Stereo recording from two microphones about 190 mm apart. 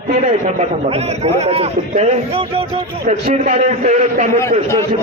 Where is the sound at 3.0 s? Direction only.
40° right (ahead or behind).